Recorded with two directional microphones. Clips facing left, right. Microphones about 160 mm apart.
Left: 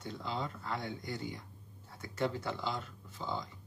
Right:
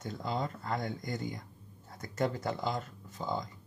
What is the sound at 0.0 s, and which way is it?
Speech, 45° right (ahead or behind).